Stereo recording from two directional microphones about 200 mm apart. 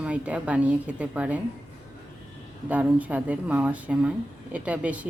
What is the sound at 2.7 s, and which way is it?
Speech, 10° right (ahead or behind).